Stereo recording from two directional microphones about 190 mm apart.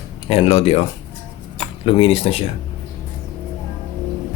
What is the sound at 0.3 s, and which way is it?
Speech, 30° left (ahead or behind).